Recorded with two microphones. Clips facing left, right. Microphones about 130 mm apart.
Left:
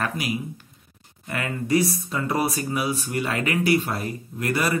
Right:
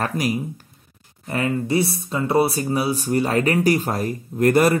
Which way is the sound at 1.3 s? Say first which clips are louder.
Right 2 dB; 30° right (ahead or behind).